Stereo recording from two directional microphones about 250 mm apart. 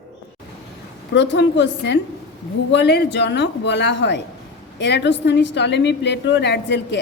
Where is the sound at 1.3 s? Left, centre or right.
Left.